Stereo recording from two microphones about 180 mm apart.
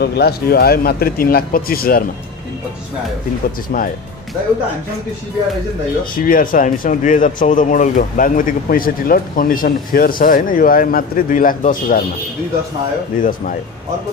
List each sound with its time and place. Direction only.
0.0 s speech: 65° left (ahead or behind)
6.1 s speech: 50° left (ahead or behind)
13.2 s speech: 50° left (ahead or behind)